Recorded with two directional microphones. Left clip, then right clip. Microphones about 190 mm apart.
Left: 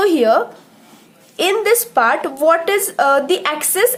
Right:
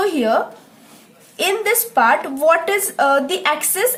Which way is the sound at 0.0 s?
35° left (ahead or behind).